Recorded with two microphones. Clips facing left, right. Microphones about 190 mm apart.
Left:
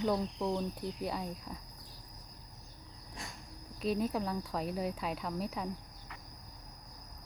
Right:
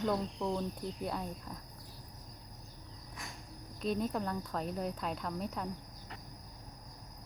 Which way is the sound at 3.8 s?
5° left (ahead or behind).